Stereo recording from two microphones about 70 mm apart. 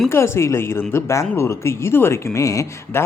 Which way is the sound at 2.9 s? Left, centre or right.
Left.